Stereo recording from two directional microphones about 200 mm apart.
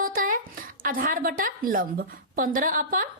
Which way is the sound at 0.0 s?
45° right (ahead or behind).